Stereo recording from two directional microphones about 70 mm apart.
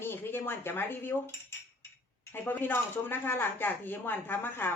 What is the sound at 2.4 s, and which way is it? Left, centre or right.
Speech, left.